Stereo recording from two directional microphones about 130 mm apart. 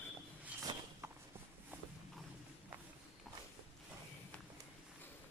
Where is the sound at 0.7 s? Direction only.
40° right (ahead or behind).